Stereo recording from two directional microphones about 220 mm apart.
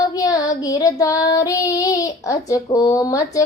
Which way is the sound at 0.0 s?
15° left (ahead or behind).